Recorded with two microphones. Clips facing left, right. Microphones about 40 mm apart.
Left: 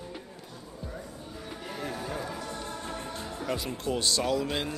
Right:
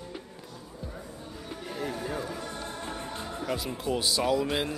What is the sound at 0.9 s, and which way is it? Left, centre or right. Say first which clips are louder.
Music: left 1 dB; centre.